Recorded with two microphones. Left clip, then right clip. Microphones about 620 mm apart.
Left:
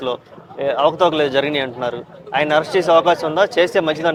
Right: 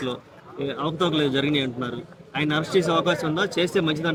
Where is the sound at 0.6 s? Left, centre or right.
Left.